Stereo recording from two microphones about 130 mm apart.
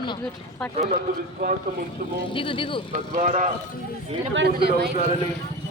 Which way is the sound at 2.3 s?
40° left (ahead or behind).